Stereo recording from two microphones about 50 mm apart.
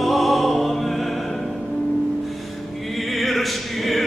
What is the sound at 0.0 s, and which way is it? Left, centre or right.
Music, centre.